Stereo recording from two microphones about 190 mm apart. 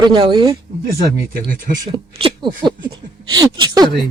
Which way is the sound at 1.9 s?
25° right (ahead or behind).